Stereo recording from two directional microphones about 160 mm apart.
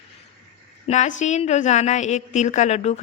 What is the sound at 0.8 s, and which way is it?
A woman's voice, 45° left (ahead or behind).